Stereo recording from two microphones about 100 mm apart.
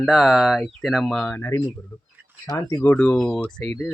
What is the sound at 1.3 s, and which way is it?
Speech, 20° left (ahead or behind).